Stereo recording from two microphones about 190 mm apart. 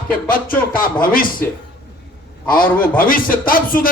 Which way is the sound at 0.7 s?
45° left (ahead or behind).